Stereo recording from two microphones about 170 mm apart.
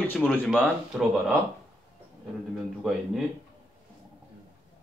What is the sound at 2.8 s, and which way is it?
Speech, centre (ahead or behind).